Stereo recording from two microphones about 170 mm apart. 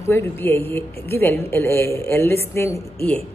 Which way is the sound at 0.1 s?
15° left (ahead or behind).